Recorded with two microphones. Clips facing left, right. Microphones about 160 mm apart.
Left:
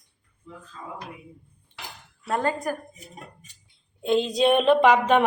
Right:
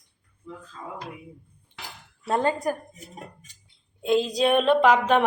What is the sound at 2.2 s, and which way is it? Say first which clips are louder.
Speech: right 2 dB; 25° right (ahead or behind).